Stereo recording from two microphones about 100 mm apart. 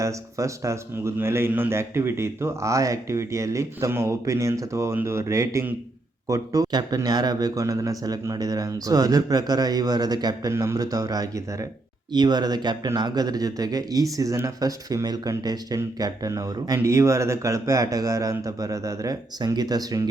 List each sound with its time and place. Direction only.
0.0 s speech: 30° right (ahead or behind)
10.5 s speech: 25° right (ahead or behind)
10.8 s speech: 35° right (ahead or behind)